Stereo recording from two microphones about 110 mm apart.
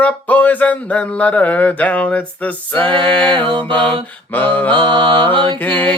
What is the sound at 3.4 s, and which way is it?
Mantra, 50° right (ahead or behind).